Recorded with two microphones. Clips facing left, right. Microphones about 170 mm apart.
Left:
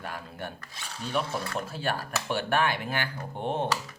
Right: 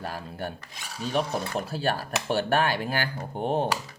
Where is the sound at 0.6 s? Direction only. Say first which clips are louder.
Right 1 dB; 15° right (ahead or behind).